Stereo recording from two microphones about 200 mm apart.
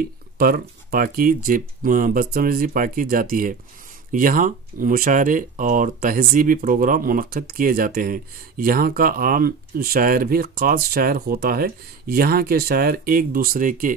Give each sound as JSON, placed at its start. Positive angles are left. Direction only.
{"t": 0.4, "sound": "speech", "side_deg": -45}